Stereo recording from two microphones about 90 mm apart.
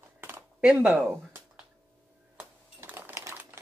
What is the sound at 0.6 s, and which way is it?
Speech, 10° right (ahead or behind).